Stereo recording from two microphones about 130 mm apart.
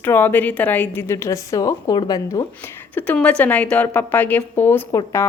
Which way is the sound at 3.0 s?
10° left (ahead or behind).